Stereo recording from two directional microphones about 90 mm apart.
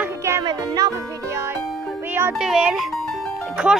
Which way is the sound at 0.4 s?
45° right (ahead or behind).